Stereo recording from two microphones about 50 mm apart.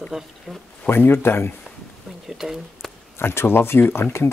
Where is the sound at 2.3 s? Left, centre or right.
Centre.